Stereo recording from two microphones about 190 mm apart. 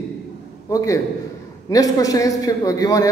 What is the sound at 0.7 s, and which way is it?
A man's voice, 15° left (ahead or behind).